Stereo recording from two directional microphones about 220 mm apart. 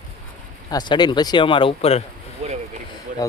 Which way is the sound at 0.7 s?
20° left (ahead or behind).